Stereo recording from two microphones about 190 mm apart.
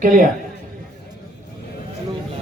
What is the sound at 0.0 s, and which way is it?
Speech, 45° right (ahead or behind).